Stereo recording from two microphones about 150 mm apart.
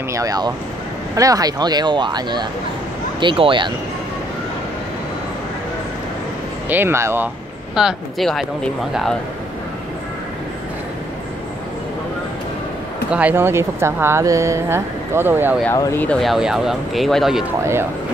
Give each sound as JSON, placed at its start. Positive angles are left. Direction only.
{"t": 0.1, "sound": "speech", "side_deg": -25}
{"t": 6.7, "sound": "speech", "side_deg": -15}
{"t": 7.7, "sound": "speech", "side_deg": 0}
{"t": 13.1, "sound": "speech", "side_deg": -10}
{"t": 15.7, "sound": "speech", "side_deg": 20}
{"t": 16.2, "sound": "speech", "side_deg": 0}